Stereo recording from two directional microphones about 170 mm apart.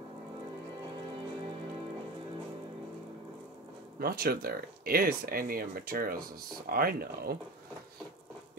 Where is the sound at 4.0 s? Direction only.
65° right (ahead or behind).